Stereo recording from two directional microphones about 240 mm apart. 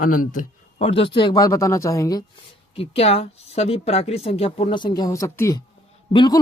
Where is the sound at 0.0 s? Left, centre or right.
Left.